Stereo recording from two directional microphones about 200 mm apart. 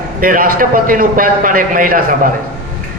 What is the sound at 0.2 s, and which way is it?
A man's voice, 45° right (ahead or behind).